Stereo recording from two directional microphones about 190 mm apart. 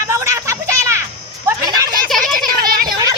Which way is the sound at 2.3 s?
50° right (ahead or behind).